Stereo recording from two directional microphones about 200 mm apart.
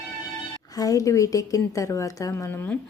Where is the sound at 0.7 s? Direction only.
15° left (ahead or behind).